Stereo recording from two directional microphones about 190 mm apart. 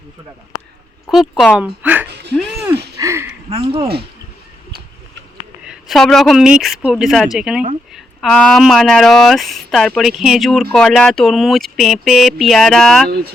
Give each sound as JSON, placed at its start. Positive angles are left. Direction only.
{"t": 1.1, "sound": "speech", "side_deg": 0}
{"t": 3.0, "sound": "a sound", "side_deg": -15}
{"t": 3.5, "sound": "speech", "side_deg": -30}
{"t": 5.6, "sound": "speech", "side_deg": 0}